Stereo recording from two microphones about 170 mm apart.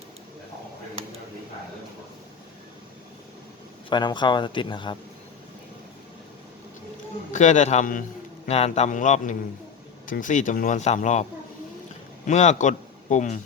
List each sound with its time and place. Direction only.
3.8 s speech: 25° left (ahead or behind)
7.3 s a man's voice: 45° left (ahead or behind)